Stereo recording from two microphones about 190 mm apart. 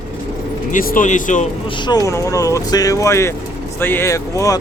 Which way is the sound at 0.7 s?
45° left (ahead or behind).